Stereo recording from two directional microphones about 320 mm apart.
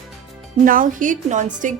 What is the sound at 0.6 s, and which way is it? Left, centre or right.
Speech, right.